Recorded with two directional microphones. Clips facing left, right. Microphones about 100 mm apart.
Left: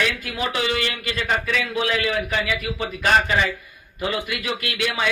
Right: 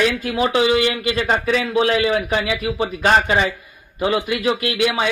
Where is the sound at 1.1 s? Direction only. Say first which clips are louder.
Right 2 dB; 45° right (ahead or behind).